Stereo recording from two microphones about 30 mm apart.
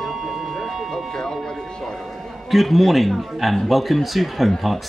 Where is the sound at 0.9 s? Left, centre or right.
Centre.